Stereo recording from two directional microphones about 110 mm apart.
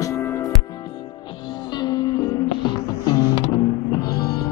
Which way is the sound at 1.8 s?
35° left (ahead or behind).